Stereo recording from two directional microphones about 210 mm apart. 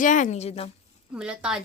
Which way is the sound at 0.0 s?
35° left (ahead or behind).